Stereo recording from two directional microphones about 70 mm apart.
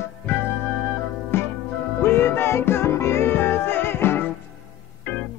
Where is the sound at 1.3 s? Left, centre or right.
Left.